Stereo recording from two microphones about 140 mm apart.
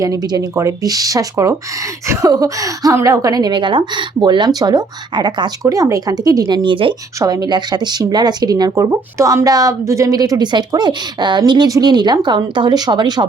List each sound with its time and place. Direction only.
0.0 s speech: 25° right (ahead or behind)
7.2 s speech: 25° right (ahead or behind)